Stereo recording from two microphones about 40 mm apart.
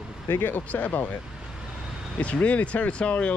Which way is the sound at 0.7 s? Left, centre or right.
Left.